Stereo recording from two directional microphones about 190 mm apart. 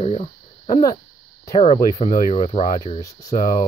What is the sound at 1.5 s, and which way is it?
Speech, 35° left (ahead or behind).